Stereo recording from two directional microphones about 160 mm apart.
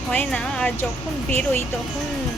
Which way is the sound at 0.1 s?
10° left (ahead or behind).